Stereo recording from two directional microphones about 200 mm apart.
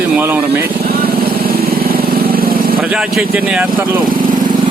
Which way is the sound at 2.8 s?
5° right (ahead or behind).